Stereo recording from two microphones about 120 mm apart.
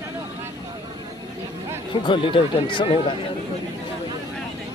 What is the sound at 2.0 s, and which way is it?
Speech, 45° left (ahead or behind).